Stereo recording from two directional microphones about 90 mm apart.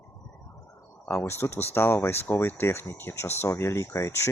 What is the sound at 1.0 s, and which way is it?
Speech, 25° left (ahead or behind).